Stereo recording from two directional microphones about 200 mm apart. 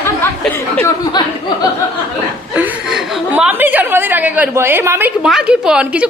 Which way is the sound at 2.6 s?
5° right (ahead or behind).